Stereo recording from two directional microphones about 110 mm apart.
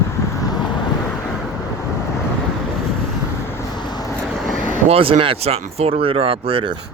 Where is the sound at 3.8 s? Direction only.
40° left (ahead or behind).